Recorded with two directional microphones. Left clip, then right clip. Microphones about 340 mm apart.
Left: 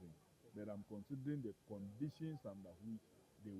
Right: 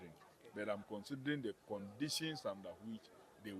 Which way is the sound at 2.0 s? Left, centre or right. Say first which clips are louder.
Right 8 dB; centre.